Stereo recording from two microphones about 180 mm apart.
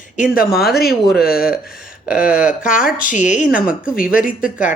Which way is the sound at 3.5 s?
5° right (ahead or behind).